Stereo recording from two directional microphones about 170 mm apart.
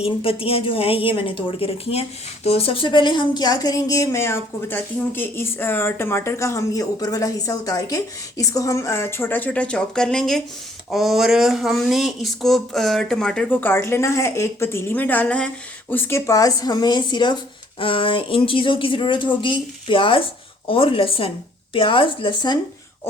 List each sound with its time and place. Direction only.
0.0 s speech: 35° left (ahead or behind)